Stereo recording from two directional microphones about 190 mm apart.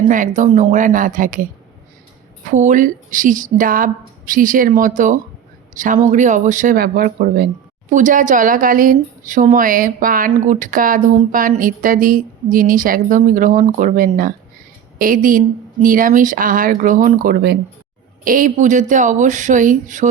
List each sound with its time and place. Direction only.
0.1 s speech: 40° right (ahead or behind)
2.5 s speech: 40° right (ahead or behind)